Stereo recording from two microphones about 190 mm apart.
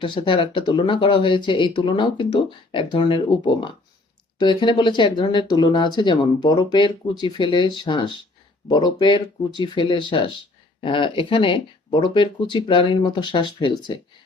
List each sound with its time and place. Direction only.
0.0 s speech: 25° left (ahead or behind)